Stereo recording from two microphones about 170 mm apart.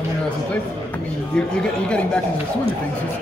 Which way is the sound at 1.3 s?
5° left (ahead or behind).